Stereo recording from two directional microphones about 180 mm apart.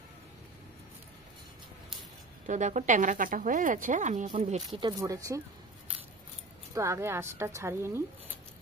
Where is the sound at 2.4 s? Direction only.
45° right (ahead or behind).